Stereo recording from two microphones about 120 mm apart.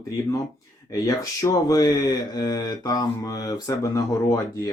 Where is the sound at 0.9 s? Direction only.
30° left (ahead or behind).